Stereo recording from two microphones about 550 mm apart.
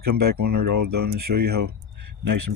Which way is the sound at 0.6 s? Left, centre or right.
Right.